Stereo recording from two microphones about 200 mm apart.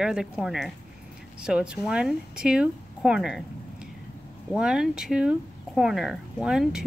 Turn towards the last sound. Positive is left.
turn(degrees=-5)  # may be behind; listen again after turning